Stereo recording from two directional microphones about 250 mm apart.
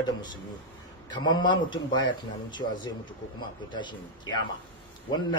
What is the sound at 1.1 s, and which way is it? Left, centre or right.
Speech, centre.